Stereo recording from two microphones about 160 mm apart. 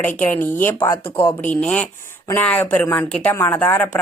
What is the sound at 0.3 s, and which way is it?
Speech, 10° left (ahead or behind).